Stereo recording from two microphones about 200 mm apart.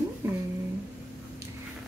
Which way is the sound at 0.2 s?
10° right (ahead or behind).